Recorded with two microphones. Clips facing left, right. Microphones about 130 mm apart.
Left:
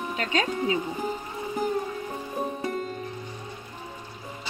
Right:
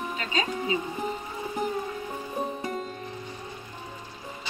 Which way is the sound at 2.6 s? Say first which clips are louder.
Left 2 dB; centre (ahead or behind).